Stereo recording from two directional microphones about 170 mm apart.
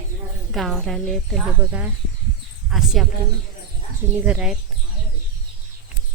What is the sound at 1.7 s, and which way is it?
Speech, 10° right (ahead or behind).